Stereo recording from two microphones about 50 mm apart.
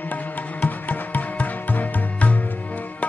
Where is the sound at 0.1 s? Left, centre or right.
Left.